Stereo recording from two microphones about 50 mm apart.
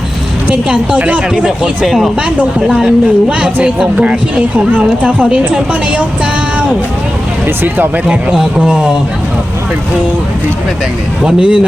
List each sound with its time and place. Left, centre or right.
0.5 s a man's voice: centre
1.8 s speech: centre
2.8 s speech: right
7.4 s speech: right
8.0 s a man's voice: centre
11.2 s a man's voice: centre